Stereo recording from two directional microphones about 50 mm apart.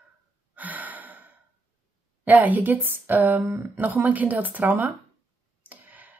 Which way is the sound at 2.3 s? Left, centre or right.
Right.